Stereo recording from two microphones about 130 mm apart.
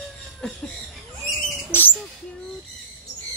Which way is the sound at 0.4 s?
5° left (ahead or behind).